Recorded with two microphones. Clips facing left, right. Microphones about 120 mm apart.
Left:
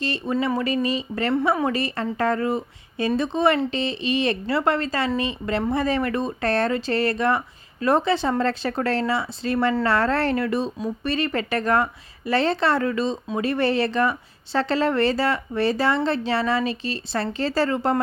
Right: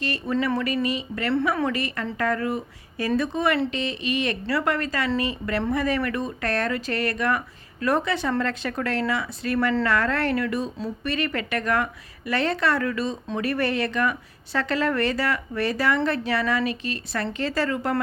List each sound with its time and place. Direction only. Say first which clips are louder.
0.0 s speech: left 2 dB; 25° left (ahead or behind)
0.3 s speech: even; 15° left (ahead or behind)
0.6 s speech: left 2 dB; 30° left (ahead or behind)